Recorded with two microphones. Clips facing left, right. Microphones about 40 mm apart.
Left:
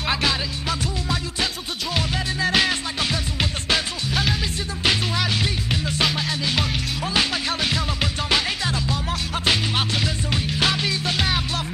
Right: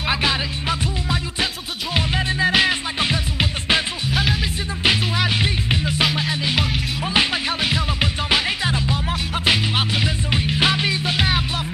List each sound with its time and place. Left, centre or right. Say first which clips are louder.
0.0 s music: right 2 dB; centre